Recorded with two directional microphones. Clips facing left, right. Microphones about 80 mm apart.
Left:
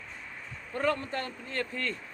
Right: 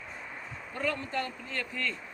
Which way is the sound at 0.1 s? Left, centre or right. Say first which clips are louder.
Right 3 dB; centre.